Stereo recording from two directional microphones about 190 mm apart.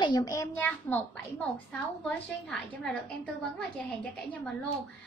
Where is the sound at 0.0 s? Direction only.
20° left (ahead or behind).